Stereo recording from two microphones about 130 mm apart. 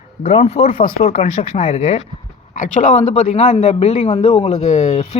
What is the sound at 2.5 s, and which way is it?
A man's voice, 75° left (ahead or behind).